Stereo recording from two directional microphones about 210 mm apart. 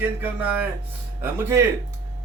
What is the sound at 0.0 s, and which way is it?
Speech, 5° right (ahead or behind).